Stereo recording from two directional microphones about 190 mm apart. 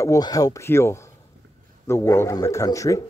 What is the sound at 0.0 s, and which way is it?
A man's voice, 20° left (ahead or behind).